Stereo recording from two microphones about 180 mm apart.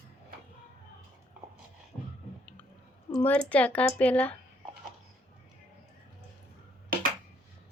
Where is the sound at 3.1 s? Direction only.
5° left (ahead or behind).